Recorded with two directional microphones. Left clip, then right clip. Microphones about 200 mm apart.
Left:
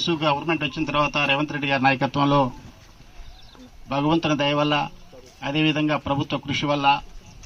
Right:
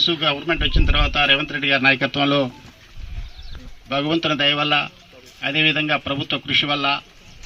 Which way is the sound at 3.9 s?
55° left (ahead or behind).